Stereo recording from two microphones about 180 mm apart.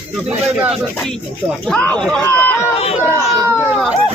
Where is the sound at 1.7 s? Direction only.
5° left (ahead or behind).